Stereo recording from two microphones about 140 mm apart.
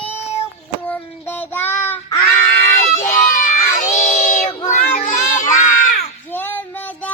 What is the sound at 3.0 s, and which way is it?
Crowd, 60° left (ahead or behind).